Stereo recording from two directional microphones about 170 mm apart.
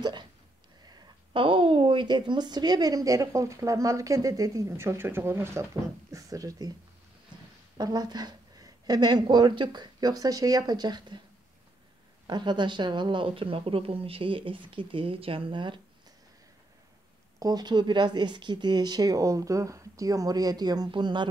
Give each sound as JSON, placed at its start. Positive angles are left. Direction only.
{"t": 0.8, "sound": "a woman's voice", "side_deg": -30}
{"t": 7.7, "sound": "a woman's voice", "side_deg": -25}
{"t": 12.3, "sound": "speech", "side_deg": -25}
{"t": 17.4, "sound": "a woman's voice", "side_deg": -25}